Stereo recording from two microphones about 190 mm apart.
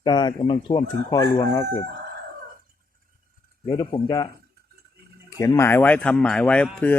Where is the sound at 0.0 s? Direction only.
25° left (ahead or behind).